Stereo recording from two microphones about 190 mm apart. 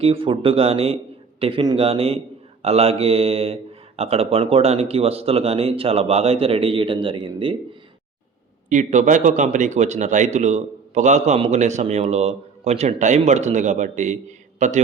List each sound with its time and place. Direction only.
0.0 s a man's voice: 30° right (ahead or behind)
8.7 s speech: 40° right (ahead or behind)